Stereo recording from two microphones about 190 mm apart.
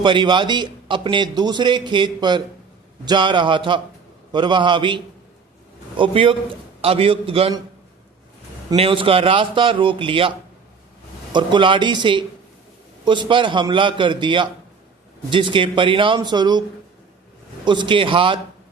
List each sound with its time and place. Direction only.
0.0 s a man's voice: 25° right (ahead or behind)
8.7 s speech: 30° right (ahead or behind)
17.7 s speech: 25° right (ahead or behind)